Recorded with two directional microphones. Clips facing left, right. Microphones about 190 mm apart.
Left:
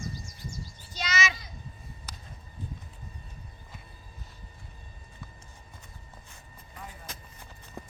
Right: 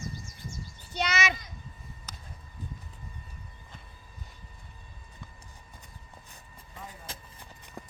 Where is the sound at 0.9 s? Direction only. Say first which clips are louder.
Right 2 dB; 60° right (ahead or behind).